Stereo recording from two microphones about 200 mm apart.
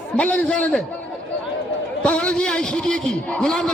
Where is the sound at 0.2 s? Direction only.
5° left (ahead or behind).